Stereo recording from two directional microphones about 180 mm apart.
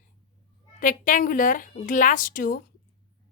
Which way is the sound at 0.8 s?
45° left (ahead or behind).